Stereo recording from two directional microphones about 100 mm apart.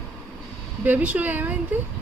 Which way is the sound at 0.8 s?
15° right (ahead or behind).